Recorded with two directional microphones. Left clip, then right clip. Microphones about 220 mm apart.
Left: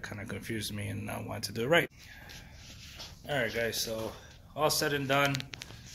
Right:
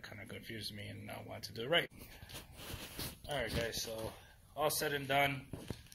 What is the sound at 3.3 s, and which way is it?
Speech, 5° left (ahead or behind).